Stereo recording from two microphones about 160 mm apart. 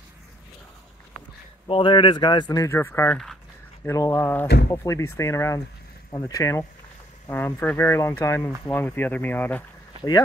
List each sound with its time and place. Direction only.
1.7 s speech: 30° left (ahead or behind); by 3.3 s 5° left (ahead or behind)
3.8 s speech: 20° left (ahead or behind)